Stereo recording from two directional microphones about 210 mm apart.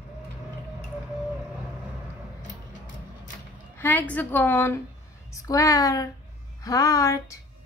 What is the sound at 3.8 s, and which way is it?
A woman's voice, 10° left (ahead or behind).